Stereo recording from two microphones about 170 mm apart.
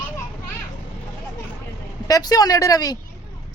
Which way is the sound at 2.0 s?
20° left (ahead or behind).